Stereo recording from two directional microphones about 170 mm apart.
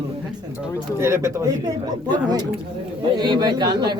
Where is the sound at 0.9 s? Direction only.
15° right (ahead or behind).